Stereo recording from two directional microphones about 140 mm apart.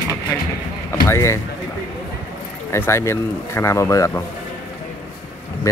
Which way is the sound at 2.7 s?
20° left (ahead or behind).